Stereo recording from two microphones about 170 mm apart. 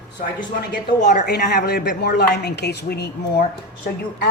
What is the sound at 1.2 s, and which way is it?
Speech, 75° left (ahead or behind).